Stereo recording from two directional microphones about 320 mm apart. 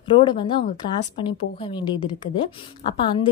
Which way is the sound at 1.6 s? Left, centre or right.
Centre.